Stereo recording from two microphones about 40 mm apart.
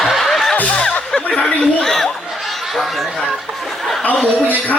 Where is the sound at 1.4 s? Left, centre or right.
Centre.